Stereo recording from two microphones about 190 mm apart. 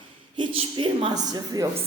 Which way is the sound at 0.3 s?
25° right (ahead or behind).